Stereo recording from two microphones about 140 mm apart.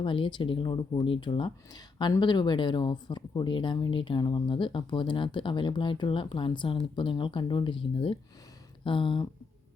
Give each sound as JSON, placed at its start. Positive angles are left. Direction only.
{"t": 0.0, "sound": "speech", "side_deg": 35}